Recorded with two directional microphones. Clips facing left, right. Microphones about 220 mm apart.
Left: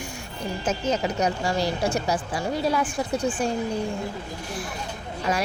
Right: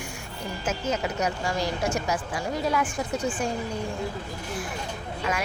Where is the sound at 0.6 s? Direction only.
35° left (ahead or behind).